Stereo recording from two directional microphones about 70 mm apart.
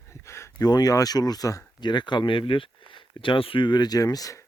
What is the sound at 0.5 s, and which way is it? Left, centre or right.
Speech, left.